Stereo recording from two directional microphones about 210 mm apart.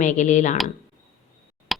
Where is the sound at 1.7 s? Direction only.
Centre (ahead or behind).